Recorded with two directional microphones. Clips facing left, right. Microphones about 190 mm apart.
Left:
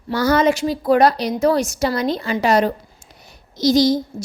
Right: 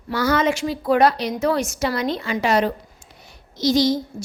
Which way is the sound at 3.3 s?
40° left (ahead or behind).